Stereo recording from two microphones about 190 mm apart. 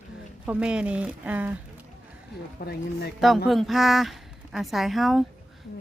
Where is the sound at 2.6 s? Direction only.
55° left (ahead or behind).